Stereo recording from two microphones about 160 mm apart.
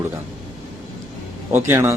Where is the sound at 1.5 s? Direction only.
15° right (ahead or behind).